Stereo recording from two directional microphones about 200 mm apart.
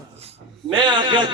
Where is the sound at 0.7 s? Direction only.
25° right (ahead or behind).